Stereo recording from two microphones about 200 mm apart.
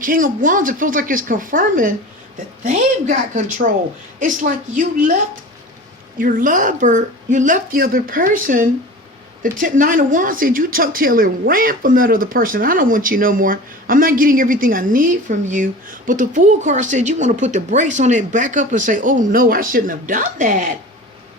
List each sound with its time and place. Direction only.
0.0 s a woman's voice: 40° right (ahead or behind)
6.1 s a woman's voice: 45° right (ahead or behind)